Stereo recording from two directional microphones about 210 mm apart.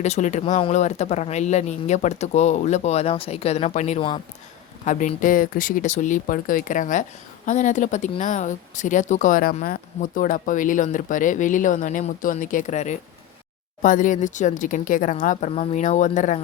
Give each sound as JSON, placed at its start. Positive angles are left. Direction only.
{"t": 0.0, "sound": "speech", "side_deg": 35}